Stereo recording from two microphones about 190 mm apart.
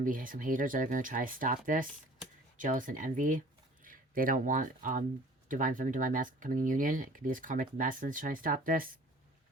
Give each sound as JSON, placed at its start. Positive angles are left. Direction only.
{"t": 0.0, "sound": "speech", "side_deg": -45}